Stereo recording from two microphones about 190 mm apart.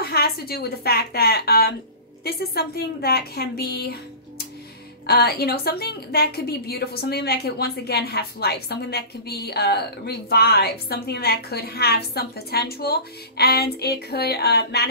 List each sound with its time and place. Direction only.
0.0 s a woman's voice: 55° left (ahead or behind)
5.0 s a woman's voice: 55° left (ahead or behind)